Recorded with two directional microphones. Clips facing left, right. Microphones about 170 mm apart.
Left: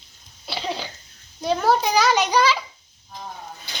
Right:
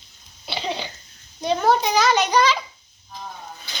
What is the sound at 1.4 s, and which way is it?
A child's voice, 5° left (ahead or behind).